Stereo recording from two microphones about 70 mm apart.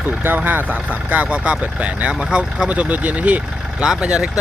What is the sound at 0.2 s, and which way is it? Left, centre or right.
Speech, right.